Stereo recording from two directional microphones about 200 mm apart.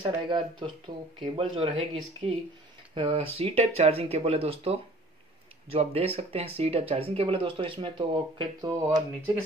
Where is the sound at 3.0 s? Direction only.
25° right (ahead or behind).